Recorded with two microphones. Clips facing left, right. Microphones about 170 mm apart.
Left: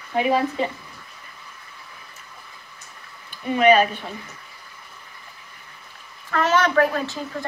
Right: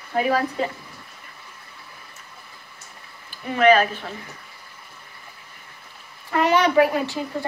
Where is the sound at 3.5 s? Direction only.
5° left (ahead or behind).